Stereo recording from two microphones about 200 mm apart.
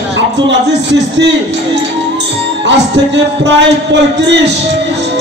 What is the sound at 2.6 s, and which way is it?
A man's voice, 65° right (ahead or behind).